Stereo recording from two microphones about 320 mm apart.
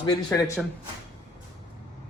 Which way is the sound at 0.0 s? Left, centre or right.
Centre.